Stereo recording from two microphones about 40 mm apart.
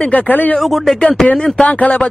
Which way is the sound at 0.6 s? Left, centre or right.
Centre.